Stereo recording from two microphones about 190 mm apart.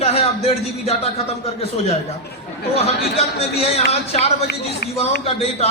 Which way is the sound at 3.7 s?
35° left (ahead or behind).